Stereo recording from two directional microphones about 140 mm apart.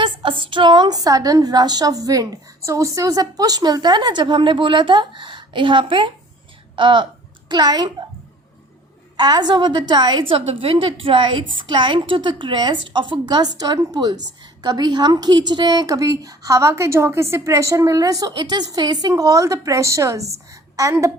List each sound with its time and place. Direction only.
0.0 s a woman's voice: 35° right (ahead or behind)
9.1 s a woman's voice: 30° right (ahead or behind)